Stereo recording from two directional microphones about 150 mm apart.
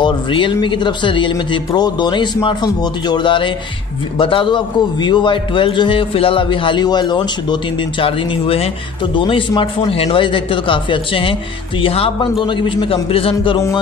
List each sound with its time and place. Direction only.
0.0 s a man's voice: 30° left (ahead or behind)